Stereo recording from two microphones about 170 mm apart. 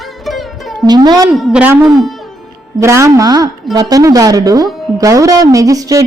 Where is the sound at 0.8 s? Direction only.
25° right (ahead or behind).